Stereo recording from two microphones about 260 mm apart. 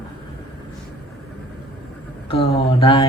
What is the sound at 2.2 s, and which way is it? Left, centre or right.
Speech, left.